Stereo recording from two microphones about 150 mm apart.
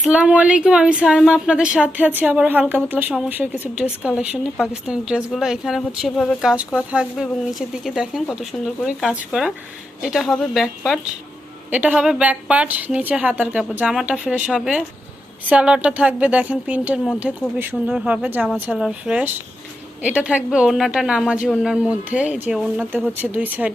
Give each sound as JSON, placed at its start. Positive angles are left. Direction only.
{"t": 0.0, "sound": "speech", "side_deg": -5}